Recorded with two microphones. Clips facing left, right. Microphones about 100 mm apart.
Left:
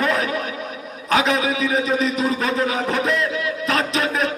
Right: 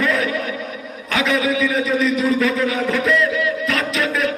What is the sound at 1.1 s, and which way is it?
A man's voice, 30° left (ahead or behind).